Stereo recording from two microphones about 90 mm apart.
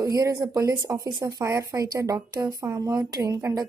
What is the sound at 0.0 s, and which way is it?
Speech, 40° right (ahead or behind).